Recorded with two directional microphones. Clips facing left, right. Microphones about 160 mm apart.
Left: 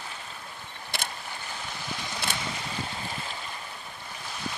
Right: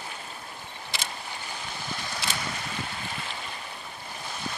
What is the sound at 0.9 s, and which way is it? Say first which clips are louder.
Boat: left 2 dB; 55° left (ahead or behind).